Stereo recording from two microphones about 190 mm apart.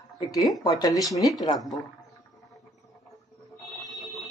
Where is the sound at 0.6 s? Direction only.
20° left (ahead or behind).